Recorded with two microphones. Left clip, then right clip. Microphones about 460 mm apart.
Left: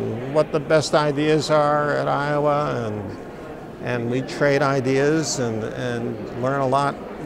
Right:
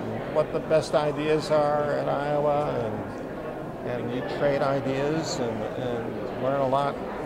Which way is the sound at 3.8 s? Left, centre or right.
Left.